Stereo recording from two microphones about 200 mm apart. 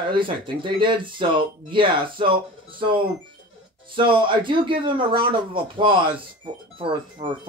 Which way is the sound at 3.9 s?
25° right (ahead or behind).